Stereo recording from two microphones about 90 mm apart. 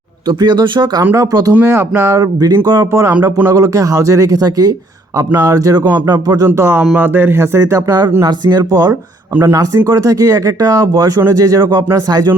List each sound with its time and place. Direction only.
0.3 s speech: 50° right (ahead or behind)
1.1 s speech: 40° right (ahead or behind)
1.6 s speech: 30° right (ahead or behind)
3.2 s speech: 25° right (ahead or behind)
3.5 s speech: 40° right (ahead or behind)
6.5 s speech: 25° right (ahead or behind)
8.3 s speech: 45° right (ahead or behind)
9.3 s speech: 30° right (ahead or behind)